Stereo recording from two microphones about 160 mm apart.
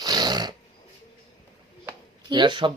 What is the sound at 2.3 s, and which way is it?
Speech, 30° right (ahead or behind).